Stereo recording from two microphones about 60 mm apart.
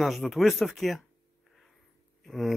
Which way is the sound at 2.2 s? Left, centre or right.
Centre.